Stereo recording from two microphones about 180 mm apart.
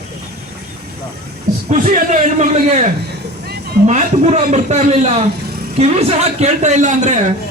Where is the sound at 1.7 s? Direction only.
40° right (ahead or behind).